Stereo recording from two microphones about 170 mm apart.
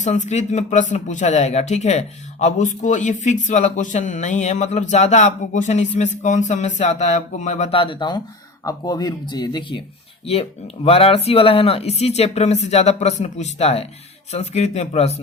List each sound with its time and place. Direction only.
0.0 s speech: 45° left (ahead or behind); by 9.8 s 25° left (ahead or behind)
10.8 s speech: 35° left (ahead or behind)